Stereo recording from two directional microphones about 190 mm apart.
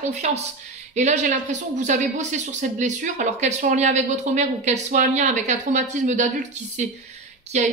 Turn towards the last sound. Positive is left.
turn(degrees=-35)  # may be behind; listen again after turning